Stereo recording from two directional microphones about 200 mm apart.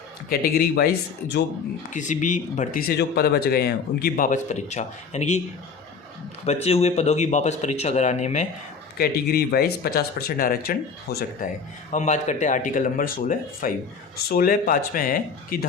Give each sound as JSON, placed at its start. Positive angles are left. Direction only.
{"t": 0.3, "sound": "speech", "side_deg": 50}
{"t": 1.9, "sound": "speech", "side_deg": 40}
{"t": 6.4, "sound": "speech", "side_deg": 30}
{"t": 9.0, "sound": "speech", "side_deg": 50}
{"t": 11.9, "sound": "speech", "side_deg": 35}